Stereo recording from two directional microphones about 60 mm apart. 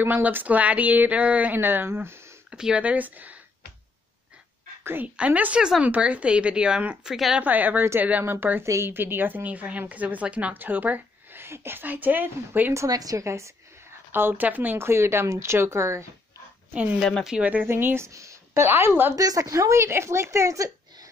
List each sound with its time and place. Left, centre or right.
0.0 s a woman's voice: right
1.6 s a woman's voice: right
2.5 s a woman's voice: centre
5.0 s a woman's voice: right
7.1 s speech: centre
7.3 s a woman's voice: right
11.4 s a woman's voice: right
12.7 s a woman's voice: right
14.1 s speech: right
17.4 s a woman's voice: right
17.6 s speech: right
18.1 s a sound: right
18.7 s a woman's voice: right
19.1 s a woman's voice: right